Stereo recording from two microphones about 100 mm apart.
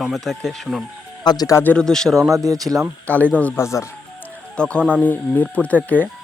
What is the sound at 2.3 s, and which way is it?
Speech, 35° right (ahead or behind).